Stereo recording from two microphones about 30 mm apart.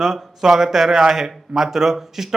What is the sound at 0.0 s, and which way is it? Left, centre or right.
A man's voice, centre.